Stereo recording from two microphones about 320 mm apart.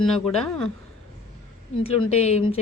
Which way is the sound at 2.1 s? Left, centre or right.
Centre.